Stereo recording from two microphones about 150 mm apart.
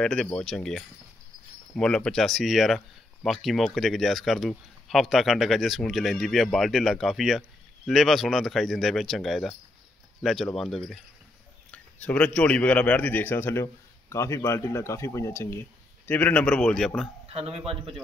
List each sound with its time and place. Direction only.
0.0 s speech: 5° left (ahead or behind)
17.3 s a man's voice: 40° right (ahead or behind)